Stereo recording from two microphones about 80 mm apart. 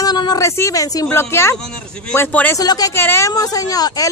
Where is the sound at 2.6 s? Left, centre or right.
Left.